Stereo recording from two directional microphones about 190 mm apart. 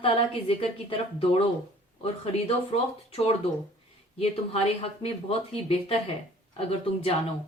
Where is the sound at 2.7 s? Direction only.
35° left (ahead or behind).